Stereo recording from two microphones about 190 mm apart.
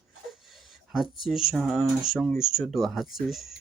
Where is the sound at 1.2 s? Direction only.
Centre (ahead or behind).